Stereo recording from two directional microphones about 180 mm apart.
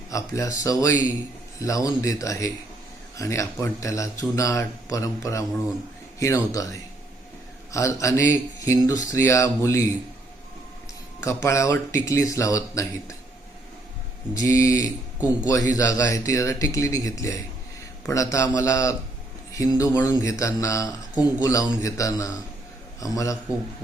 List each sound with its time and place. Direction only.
0.1 s speech: 20° left (ahead or behind)
11.2 s speech: 15° left (ahead or behind)
14.3 s a man's voice: 20° left (ahead or behind)